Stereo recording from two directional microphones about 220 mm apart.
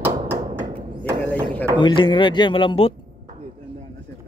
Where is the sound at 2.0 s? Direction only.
20° left (ahead or behind).